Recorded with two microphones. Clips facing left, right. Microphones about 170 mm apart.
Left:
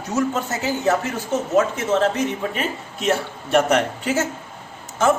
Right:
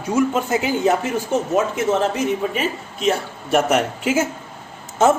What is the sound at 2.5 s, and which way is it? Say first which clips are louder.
Speech: right 2 dB; centre (ahead or behind).